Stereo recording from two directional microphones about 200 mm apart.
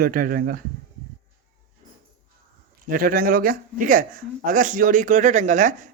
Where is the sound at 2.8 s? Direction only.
45° right (ahead or behind).